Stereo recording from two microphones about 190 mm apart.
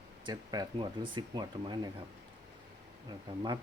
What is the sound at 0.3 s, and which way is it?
Speech, 20° right (ahead or behind).